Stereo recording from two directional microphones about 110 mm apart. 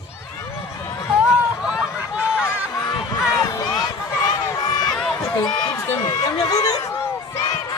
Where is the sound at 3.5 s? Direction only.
35° left (ahead or behind).